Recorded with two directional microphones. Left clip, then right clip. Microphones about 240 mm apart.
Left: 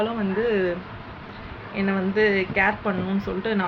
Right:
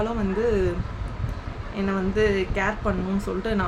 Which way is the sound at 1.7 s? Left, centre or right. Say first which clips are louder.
Left 2 dB; centre.